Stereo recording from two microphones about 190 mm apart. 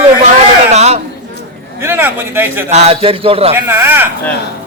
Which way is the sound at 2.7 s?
35° right (ahead or behind).